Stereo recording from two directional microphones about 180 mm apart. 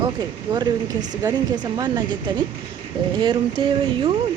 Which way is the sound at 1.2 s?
20° right (ahead or behind).